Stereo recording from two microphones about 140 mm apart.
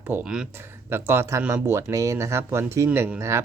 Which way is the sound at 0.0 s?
10° right (ahead or behind).